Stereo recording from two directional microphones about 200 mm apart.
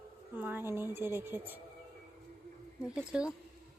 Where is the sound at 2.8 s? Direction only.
5° right (ahead or behind).